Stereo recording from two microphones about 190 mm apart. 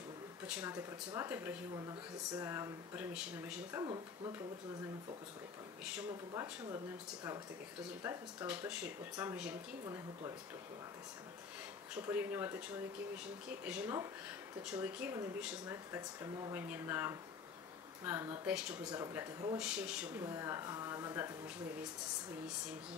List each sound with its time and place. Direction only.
0.5 s speech: 10° right (ahead or behind)
3.8 s speech: 25° right (ahead or behind)
5.9 s speech: 15° right (ahead or behind)
8.0 s speech: 15° right (ahead or behind)
11.9 s speech: 10° right (ahead or behind)
18.9 s speech: 15° right (ahead or behind)
19.6 s speech: 5° right (ahead or behind)